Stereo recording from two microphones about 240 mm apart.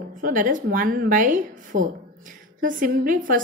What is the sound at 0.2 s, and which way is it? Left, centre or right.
A woman's voice, right.